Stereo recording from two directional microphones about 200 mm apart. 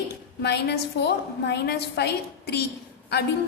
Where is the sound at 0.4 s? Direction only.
55° left (ahead or behind).